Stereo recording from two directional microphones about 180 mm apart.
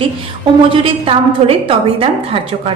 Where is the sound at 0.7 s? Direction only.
30° right (ahead or behind).